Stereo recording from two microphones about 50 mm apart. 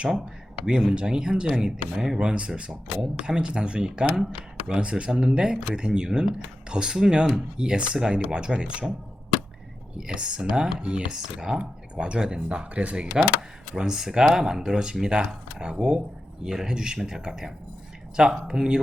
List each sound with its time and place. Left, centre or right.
0.6 s speech: centre
10.0 s speech: centre
13.7 s speech: centre